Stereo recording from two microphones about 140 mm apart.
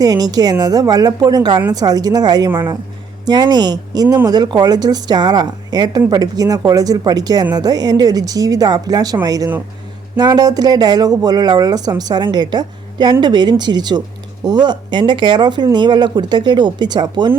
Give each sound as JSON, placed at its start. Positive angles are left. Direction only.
{"t": 0.0, "sound": "speech", "side_deg": -25}